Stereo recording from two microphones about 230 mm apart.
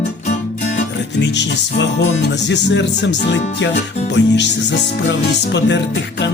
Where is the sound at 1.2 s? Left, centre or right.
Left.